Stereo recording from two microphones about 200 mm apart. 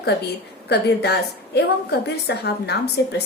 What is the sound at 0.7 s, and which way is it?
A woman's voice, 55° left (ahead or behind).